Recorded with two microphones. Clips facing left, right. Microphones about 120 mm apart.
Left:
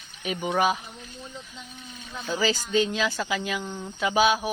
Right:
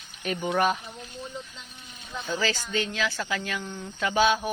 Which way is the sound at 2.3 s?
15° left (ahead or behind).